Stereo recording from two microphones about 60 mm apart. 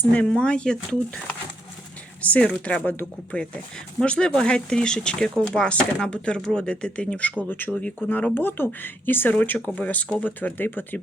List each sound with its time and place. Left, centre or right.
0.1 s speech: centre
2.2 s speech: left
2.8 s speech: left
3.3 s speech: centre
8.0 s speech: left